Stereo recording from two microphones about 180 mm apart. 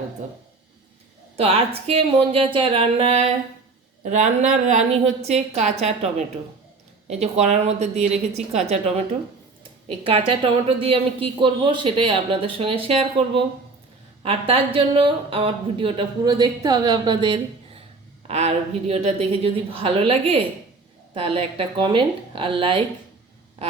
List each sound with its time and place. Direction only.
1.4 s a woman's voice: 30° right (ahead or behind)
9.8 s a woman's voice: 30° right (ahead or behind)